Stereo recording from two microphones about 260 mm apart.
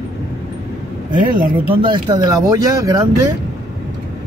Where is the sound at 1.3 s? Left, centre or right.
Right.